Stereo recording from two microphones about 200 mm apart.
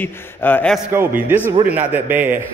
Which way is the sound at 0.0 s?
10° left (ahead or behind).